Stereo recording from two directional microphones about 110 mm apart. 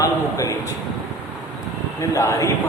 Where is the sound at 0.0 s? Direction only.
30° left (ahead or behind).